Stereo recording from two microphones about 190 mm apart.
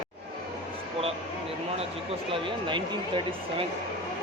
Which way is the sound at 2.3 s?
25° right (ahead or behind).